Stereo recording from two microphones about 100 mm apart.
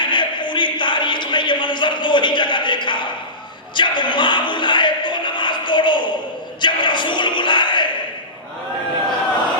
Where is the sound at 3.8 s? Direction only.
50° left (ahead or behind).